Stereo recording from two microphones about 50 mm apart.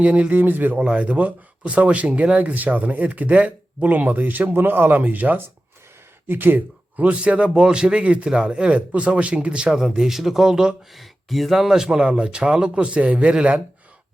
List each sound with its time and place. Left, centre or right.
0.0 s speech: right
0.8 s speech: right
6.9 s speech: right; by 10.8 s centre
10.9 s speech: centre; by 13.3 s right